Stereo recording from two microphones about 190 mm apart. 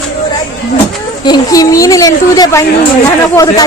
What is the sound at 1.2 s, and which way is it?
A woman's voice, 20° left (ahead or behind).